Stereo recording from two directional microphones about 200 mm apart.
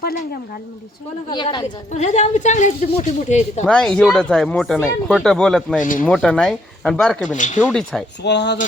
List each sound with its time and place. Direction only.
1.3 s speech: 20° left (ahead or behind)
1.9 s speech: 35° left (ahead or behind)
3.6 s speech: 5° left (ahead or behind)
5.8 s speech: 40° left (ahead or behind)
6.1 s speech: 5° left (ahead or behind)
7.3 s speech: 40° left (ahead or behind)
7.6 s speech: 5° left (ahead or behind)
8.2 s speech: 60° left (ahead or behind)